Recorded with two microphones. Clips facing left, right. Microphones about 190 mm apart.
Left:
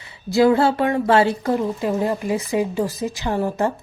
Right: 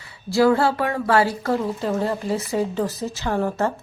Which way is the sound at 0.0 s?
20° left (ahead or behind).